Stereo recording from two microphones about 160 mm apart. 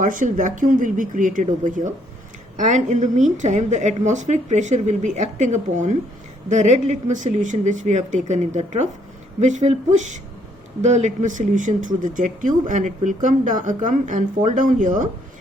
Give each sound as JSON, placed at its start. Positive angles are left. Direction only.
{"t": 0.0, "sound": "speech", "side_deg": -55}